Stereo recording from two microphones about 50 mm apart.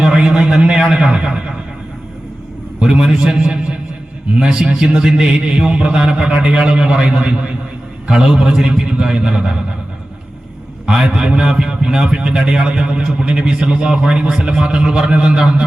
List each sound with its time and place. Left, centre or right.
0.0 s a man's voice: centre
2.8 s a man's voice: centre
10.8 s a man's voice: centre